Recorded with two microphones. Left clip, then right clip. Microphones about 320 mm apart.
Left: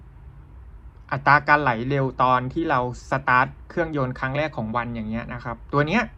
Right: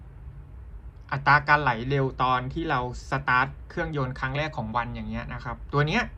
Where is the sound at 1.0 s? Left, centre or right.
Centre.